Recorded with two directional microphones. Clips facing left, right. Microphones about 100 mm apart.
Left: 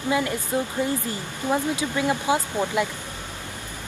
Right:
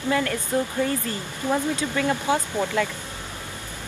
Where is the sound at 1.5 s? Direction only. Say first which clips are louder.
Even; 15° left (ahead or behind).